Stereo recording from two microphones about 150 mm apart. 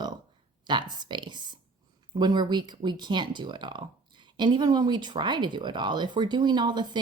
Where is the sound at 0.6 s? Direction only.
30° right (ahead or behind).